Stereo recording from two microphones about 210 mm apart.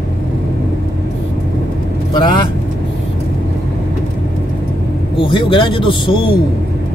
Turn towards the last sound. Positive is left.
turn(degrees=25)  # may be behind; listen again after turning